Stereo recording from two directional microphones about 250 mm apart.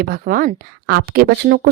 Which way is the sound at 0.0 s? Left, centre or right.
Right.